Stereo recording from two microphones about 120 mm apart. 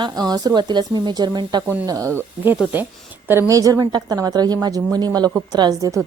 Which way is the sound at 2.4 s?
15° right (ahead or behind).